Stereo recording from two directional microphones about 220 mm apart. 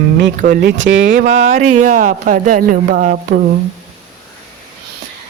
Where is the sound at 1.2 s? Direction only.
60° right (ahead or behind).